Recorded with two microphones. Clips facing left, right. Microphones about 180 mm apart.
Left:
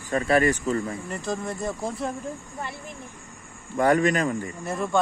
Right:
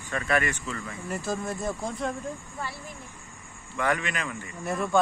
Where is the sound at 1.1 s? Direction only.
5° right (ahead or behind).